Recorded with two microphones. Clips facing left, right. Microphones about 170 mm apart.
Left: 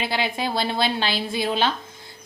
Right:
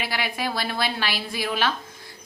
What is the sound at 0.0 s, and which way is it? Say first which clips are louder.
A woman's voice: left 3 dB; 25° left (ahead or behind).